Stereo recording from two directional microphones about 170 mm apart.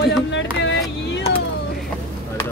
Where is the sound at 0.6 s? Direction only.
90° left.